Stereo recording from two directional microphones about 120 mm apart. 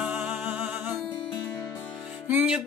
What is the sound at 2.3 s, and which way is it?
Music, 15° right (ahead or behind).